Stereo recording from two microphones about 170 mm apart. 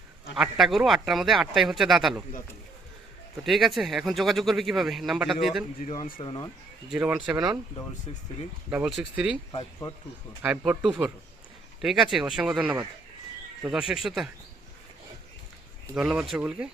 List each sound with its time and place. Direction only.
0.3 s speech: 5° right (ahead or behind)
3.4 s speech: centre (ahead or behind)
6.2 s speech: 30° left (ahead or behind)
6.9 s speech: 5° right (ahead or behind)
7.3 s speech: 20° right (ahead or behind)
8.7 s speech: 5° right (ahead or behind)
9.5 s speech: 25° left (ahead or behind)
10.7 s speech: 5° right (ahead or behind)
16.0 s speech: 5° right (ahead or behind)